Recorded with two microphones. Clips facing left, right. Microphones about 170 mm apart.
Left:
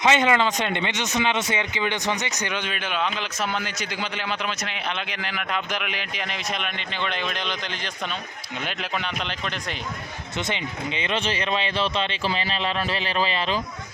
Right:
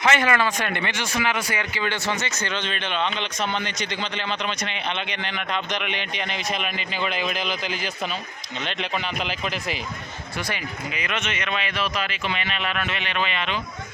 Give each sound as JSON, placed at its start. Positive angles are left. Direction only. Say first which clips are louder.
{"t": 0.0, "sound": "speech", "louder": "left 1 dB", "side_deg": 20}
{"t": 10.3, "sound": "speech", "louder": "left 2 dB", "side_deg": 25}